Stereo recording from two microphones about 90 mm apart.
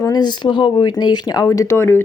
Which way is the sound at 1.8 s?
25° left (ahead or behind).